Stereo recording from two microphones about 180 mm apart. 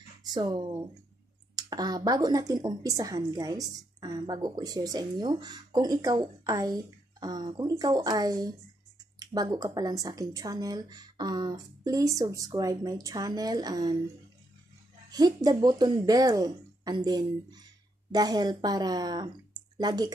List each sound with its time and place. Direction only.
0.2 s speech: 20° right (ahead or behind)
15.0 s speech: 20° right (ahead or behind)